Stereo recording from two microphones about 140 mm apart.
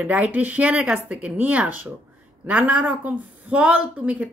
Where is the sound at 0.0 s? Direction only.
10° right (ahead or behind).